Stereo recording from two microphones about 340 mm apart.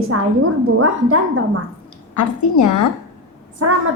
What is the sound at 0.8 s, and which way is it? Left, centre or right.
Speech, right.